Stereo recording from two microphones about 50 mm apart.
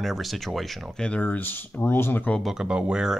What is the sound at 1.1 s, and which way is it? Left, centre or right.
Speech, left.